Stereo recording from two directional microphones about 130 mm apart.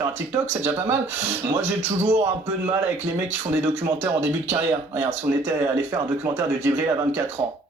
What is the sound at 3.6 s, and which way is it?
Speech, 20° right (ahead or behind).